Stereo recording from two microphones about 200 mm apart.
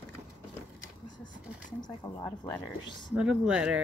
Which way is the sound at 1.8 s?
15° left (ahead or behind).